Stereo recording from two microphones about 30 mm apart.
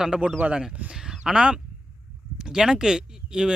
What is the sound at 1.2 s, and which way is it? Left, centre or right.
Speech, right.